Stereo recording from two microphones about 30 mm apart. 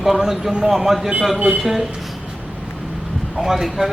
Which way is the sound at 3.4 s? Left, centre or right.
Centre.